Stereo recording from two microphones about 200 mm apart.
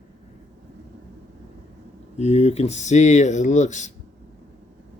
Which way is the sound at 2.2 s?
30° left (ahead or behind).